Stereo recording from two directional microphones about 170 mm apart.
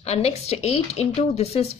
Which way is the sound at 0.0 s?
40° left (ahead or behind).